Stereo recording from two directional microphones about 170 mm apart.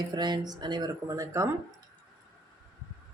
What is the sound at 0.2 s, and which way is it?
Speech, 25° right (ahead or behind).